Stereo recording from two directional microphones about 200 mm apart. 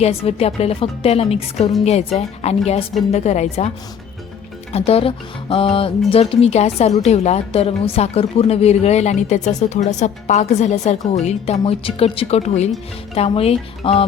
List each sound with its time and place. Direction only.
0.0 s speech: 30° left (ahead or behind)
4.7 s speech: 30° left (ahead or behind)